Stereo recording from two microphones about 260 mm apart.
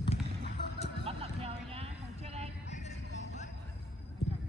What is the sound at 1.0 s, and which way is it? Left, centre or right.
Vehicle, right.